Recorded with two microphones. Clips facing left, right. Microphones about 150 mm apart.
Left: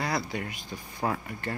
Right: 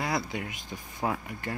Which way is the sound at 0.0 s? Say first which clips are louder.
Even; 20° right (ahead or behind).